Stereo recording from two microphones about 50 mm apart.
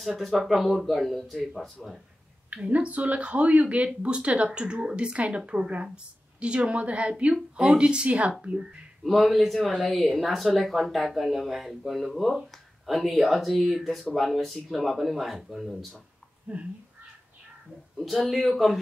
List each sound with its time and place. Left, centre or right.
0.0 s speech: centre
2.5 s speech: right
9.0 s speech: centre
16.5 s speech: right
17.9 s speech: centre